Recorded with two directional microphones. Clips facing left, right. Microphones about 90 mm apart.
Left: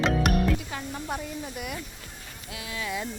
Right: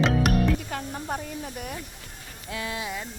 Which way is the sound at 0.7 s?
40° right (ahead or behind).